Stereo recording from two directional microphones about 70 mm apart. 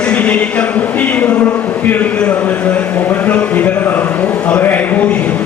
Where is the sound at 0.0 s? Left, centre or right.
Centre.